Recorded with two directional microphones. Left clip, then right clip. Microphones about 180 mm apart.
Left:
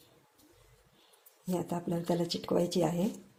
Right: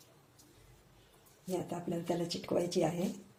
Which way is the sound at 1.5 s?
40° left (ahead or behind).